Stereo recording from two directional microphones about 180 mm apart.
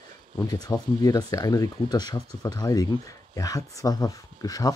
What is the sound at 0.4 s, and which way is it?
Speech, 20° left (ahead or behind).